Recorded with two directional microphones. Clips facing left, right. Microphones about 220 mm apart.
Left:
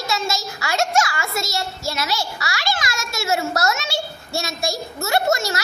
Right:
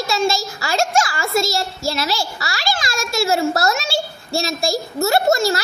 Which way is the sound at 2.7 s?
30° right (ahead or behind).